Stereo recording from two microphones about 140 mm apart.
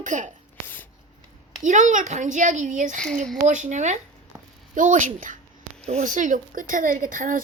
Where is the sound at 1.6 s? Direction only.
60° right (ahead or behind).